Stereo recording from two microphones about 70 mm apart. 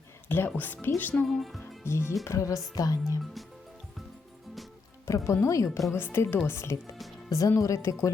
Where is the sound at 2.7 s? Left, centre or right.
Left.